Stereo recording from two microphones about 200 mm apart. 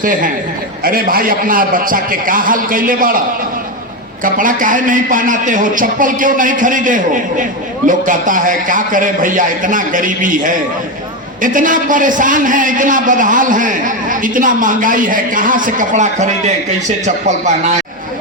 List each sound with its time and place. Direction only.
0.0 s a man's voice: 40° right (ahead or behind)
4.2 s a man's voice: 40° right (ahead or behind)